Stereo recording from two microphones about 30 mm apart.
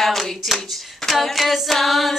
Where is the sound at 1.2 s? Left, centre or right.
Centre.